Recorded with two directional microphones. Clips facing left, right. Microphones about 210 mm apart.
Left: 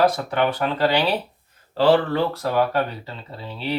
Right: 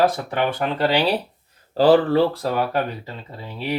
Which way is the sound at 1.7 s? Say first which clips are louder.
Right 3 dB; 35° right (ahead or behind).